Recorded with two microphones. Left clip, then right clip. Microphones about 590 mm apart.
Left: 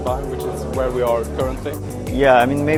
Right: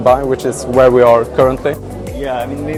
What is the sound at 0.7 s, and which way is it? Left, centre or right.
Speech, right.